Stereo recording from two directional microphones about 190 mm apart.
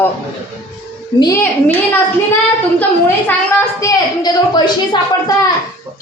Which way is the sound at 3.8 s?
20° left (ahead or behind).